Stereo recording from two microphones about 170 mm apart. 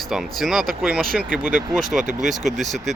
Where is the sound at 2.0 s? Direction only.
45° right (ahead or behind).